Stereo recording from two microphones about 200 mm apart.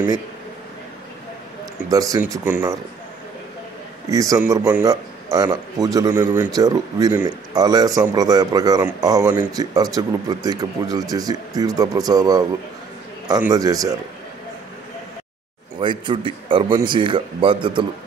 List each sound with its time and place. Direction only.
1.9 s a man's voice: 15° right (ahead or behind)
4.1 s a man's voice: 15° right (ahead or behind)
15.8 s speech: 25° right (ahead or behind)